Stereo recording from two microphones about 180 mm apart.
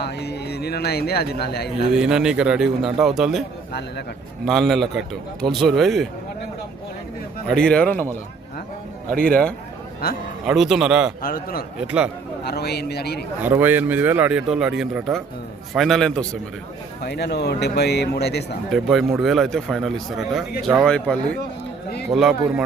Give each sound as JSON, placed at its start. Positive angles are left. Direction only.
{"t": 0.0, "sound": "speech", "side_deg": 65}
{"t": 1.9, "sound": "a man's voice", "side_deg": -5}
{"t": 3.7, "sound": "a man's voice", "side_deg": 65}
{"t": 4.4, "sound": "a man's voice", "side_deg": 0}
{"t": 7.4, "sound": "a man's voice", "side_deg": 5}
{"t": 9.0, "sound": "a man's voice", "side_deg": -55}
{"t": 9.3, "sound": "a man's voice", "side_deg": 5}
{"t": 11.2, "sound": "a man's voice", "side_deg": 55}
{"t": 11.9, "sound": "speech", "side_deg": -5}
{"t": 12.5, "sound": "a man's voice", "side_deg": 65}
{"t": 13.4, "sound": "a man's voice", "side_deg": -10}
{"t": 17.0, "sound": "a man's voice", "side_deg": 65}
{"t": 18.7, "sound": "a man's voice", "side_deg": 0}